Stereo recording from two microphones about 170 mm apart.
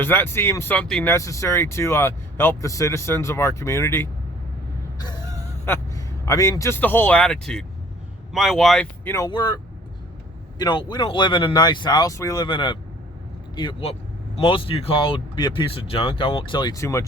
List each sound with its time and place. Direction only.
0.0 s speech: 10° left (ahead or behind)
1.1 s speech: 15° left (ahead or behind)
5.6 s speech: 15° left (ahead or behind)
9.0 s speech: 20° left (ahead or behind)
10.6 s speech: 25° left (ahead or behind)